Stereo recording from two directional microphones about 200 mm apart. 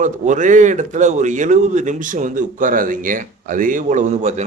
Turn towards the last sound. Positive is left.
turn(degrees=-35)  # may be behind; listen again after turning